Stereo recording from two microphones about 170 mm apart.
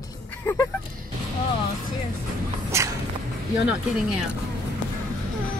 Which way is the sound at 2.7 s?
15° right (ahead or behind).